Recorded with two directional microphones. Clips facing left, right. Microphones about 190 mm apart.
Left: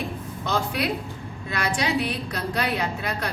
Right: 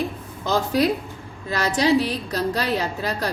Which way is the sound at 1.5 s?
35° right (ahead or behind).